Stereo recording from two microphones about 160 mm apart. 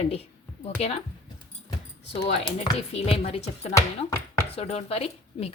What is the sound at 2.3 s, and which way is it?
Speech, 30° left (ahead or behind).